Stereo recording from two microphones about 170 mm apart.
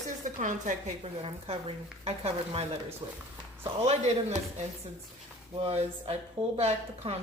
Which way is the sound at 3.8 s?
40° right (ahead or behind).